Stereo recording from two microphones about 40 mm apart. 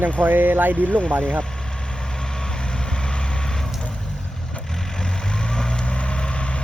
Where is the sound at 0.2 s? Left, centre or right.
Right.